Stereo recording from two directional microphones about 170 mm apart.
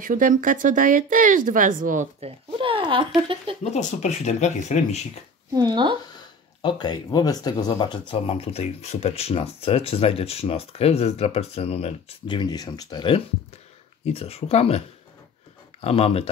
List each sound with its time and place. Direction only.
0.0 s speech: 55° right (ahead or behind); by 3.1 s 30° right (ahead or behind)
3.7 s speech: 40° left (ahead or behind)
5.5 s speech: 25° right (ahead or behind)
6.6 s speech: 25° left (ahead or behind)
8.1 s speech: 35° left (ahead or behind)
14.0 s speech: 35° left (ahead or behind)
15.8 s speech: 35° left (ahead or behind)